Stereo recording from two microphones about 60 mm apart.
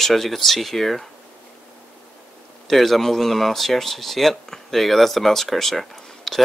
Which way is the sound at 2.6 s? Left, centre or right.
Centre.